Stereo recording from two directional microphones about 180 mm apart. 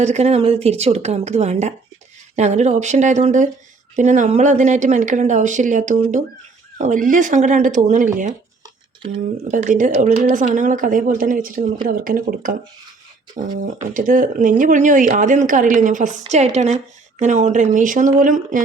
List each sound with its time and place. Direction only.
0.0 s a woman's voice: 40° right (ahead or behind)
9.0 s speech: 30° right (ahead or behind)
9.5 s speech: 45° right (ahead or behind)
13.9 s speech: 50° right (ahead or behind)